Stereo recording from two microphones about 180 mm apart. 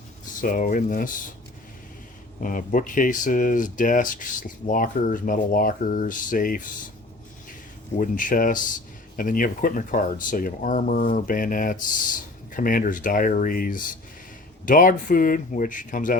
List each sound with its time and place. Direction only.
0.4 s speech: 45° left (ahead or behind)
2.4 s speech: 50° left (ahead or behind)
7.9 s speech: 45° left (ahead or behind)